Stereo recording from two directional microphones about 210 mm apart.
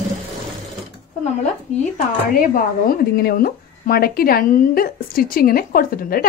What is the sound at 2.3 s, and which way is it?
Speech, 40° left (ahead or behind).